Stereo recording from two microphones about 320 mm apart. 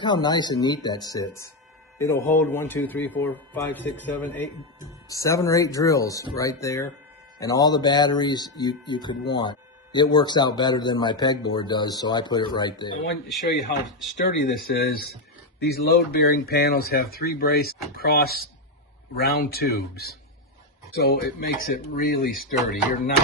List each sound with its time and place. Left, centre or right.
0.0 s speech: centre
14.3 s speech: left